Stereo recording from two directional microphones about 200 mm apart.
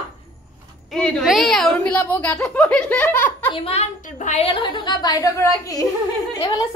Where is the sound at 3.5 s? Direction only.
30° left (ahead or behind).